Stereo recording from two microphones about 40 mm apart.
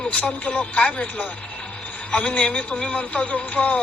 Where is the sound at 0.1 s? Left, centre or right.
Left.